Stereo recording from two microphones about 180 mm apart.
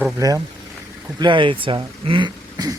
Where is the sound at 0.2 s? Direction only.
20° right (ahead or behind).